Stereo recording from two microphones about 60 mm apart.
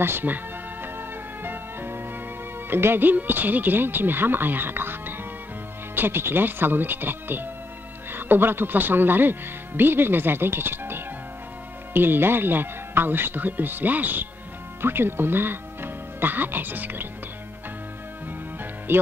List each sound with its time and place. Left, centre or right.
0.0 s speech: right
0.9 s music: right
2.7 s speech: right
18.9 s speech: right